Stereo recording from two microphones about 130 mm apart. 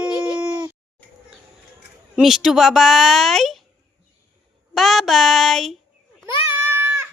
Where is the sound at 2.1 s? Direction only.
5° right (ahead or behind).